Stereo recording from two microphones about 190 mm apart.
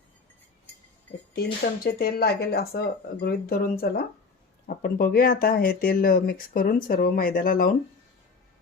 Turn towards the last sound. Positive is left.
turn(degrees=45)  # may be behind; listen again after turning